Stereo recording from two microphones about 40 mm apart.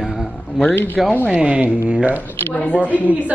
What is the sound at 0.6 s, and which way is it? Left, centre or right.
Speech, left.